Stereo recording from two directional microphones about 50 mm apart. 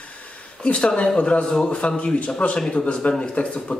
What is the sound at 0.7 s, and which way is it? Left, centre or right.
Speech, left.